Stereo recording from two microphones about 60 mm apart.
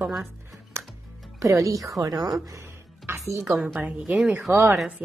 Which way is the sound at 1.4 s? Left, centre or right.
Right.